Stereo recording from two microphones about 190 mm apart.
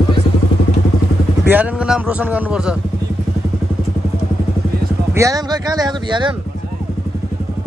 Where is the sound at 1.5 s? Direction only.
5° right (ahead or behind).